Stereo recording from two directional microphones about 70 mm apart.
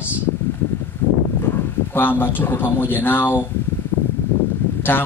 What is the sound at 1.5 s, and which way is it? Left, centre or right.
Speech, left.